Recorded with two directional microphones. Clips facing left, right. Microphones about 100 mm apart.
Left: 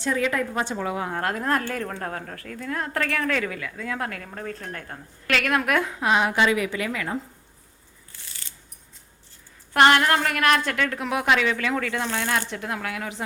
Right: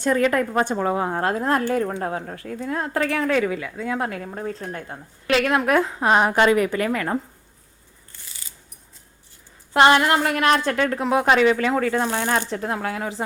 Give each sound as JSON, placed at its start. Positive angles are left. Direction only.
{"t": 0.0, "sound": "a woman's voice", "side_deg": -50}
{"t": 8.1, "sound": "coin", "side_deg": -5}
{"t": 9.7, "sound": "a woman's voice", "side_deg": -20}